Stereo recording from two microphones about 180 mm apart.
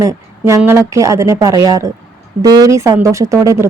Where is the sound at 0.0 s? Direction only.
15° right (ahead or behind).